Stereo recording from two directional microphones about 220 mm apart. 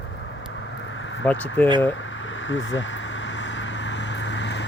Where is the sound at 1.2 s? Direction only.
5° left (ahead or behind).